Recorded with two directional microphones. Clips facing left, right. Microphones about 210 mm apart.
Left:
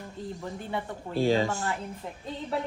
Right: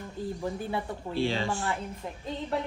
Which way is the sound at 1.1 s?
40° left (ahead or behind).